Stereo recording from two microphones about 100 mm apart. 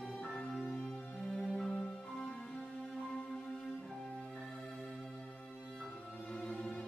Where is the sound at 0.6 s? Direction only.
10° left (ahead or behind).